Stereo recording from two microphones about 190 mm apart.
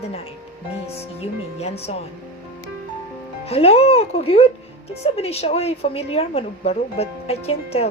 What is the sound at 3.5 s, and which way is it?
A woman's voice, 30° left (ahead or behind).